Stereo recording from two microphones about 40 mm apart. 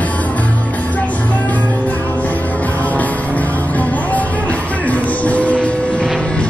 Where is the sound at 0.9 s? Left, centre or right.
Left.